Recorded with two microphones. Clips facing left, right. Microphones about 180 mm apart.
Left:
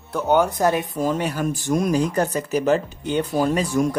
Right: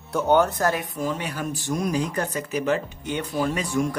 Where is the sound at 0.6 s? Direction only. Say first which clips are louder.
Left 4 dB; 20° left (ahead or behind).